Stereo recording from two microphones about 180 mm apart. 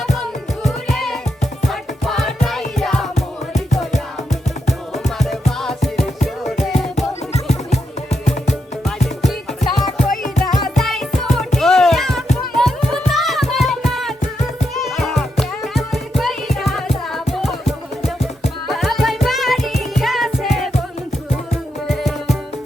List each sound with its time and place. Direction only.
0.6 s music: centre (ahead or behind)
3.2 s music: 40° left (ahead or behind)
5.0 s music: centre (ahead or behind)
7.7 s music: 40° left (ahead or behind)
9.2 s music: 5° left (ahead or behind)
10.2 s music: 45° left (ahead or behind)
10.8 s music: centre (ahead or behind)
21.8 s music: centre (ahead or behind)